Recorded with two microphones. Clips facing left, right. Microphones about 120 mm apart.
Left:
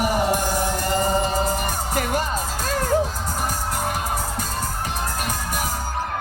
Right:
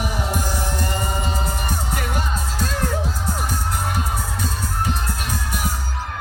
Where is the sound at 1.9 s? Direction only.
45° left (ahead or behind).